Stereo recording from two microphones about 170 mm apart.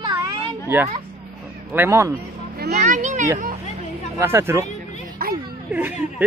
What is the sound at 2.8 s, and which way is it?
Speech, 45° right (ahead or behind).